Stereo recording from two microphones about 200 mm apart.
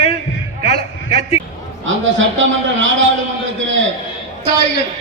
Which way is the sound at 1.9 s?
70° right (ahead or behind).